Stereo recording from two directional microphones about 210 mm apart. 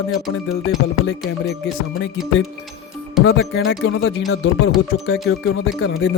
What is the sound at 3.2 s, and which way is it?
Speech, 55° left (ahead or behind).